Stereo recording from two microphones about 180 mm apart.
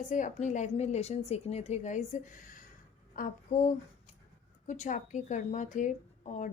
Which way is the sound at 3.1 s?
50° left (ahead or behind).